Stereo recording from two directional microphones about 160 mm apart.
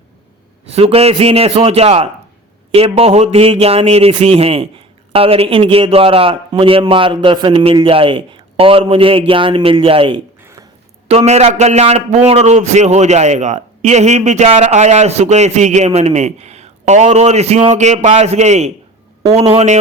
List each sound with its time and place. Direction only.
0.7 s a man's voice: 40° right (ahead or behind)